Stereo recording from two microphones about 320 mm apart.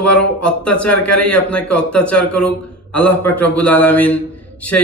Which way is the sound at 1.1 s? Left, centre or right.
Left.